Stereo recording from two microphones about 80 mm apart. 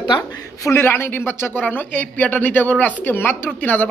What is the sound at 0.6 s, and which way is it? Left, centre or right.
Speech, left.